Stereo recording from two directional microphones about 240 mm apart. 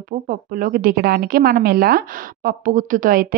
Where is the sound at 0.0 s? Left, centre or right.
Right.